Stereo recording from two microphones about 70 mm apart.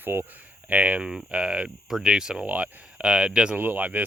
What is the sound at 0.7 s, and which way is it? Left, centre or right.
Speech, centre.